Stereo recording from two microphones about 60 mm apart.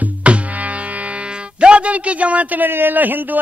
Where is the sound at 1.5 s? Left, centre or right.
Centre.